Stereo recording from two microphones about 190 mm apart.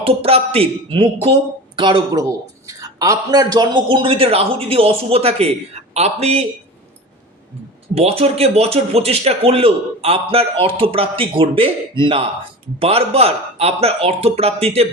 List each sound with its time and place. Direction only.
0.0 s speech: 30° right (ahead or behind)
7.9 s speech: 30° right (ahead or behind)